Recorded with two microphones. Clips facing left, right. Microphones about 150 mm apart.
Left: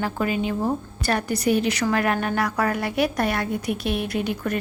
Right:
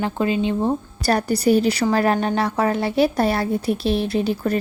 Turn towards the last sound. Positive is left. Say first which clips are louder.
# right 4 dB
turn(degrees=-30)  # may be behind; listen again after turning